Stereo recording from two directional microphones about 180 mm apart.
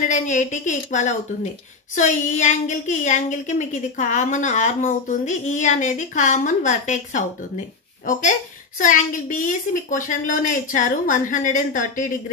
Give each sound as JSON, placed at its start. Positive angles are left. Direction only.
{"t": 0.1, "sound": "a woman's voice", "side_deg": 45}